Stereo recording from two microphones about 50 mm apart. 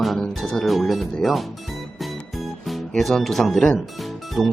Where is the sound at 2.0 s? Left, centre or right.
Centre.